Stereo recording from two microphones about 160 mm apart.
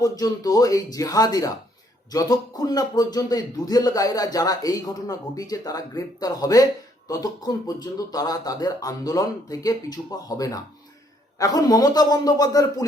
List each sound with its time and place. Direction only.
0.0 s a man's voice: 20° left (ahead or behind)